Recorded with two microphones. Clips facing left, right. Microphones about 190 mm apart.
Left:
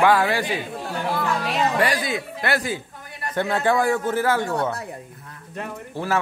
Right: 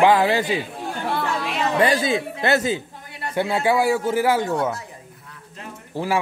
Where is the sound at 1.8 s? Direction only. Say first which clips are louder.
Right 4 dB; 25° right (ahead or behind).